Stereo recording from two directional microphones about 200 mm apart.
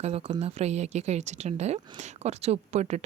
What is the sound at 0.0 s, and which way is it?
Speech, 25° right (ahead or behind).